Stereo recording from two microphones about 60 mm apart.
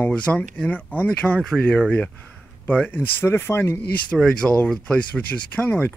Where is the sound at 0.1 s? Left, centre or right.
Centre.